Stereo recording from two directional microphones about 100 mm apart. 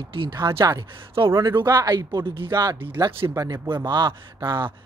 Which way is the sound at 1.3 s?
35° right (ahead or behind).